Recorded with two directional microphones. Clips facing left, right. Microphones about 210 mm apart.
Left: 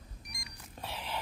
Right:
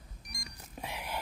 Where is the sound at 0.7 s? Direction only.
10° right (ahead or behind).